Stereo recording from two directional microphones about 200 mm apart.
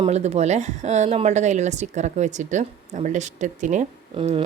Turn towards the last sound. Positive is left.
turn(degrees=-35)  # may be behind; listen again after turning